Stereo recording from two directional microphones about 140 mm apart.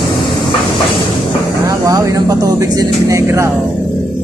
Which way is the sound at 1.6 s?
25° right (ahead or behind).